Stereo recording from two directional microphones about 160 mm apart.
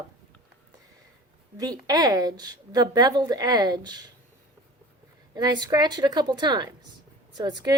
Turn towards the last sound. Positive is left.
turn(degrees=-25)  # may be behind; listen again after turning